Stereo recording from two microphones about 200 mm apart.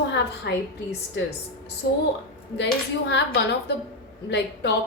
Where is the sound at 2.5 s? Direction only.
60° left (ahead or behind).